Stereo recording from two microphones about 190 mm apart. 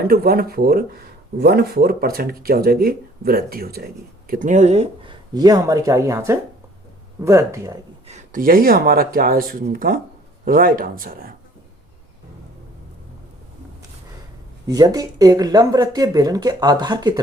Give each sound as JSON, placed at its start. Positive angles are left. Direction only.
{"t": 0.1, "sound": "speech", "side_deg": -50}
{"t": 4.3, "sound": "speech", "side_deg": -40}
{"t": 5.3, "sound": "speech", "side_deg": -20}
{"t": 8.0, "sound": "speech", "side_deg": -40}
{"t": 14.7, "sound": "speech", "side_deg": -20}